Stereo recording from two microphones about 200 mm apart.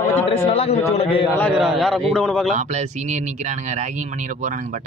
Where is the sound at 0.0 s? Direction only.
30° left (ahead or behind).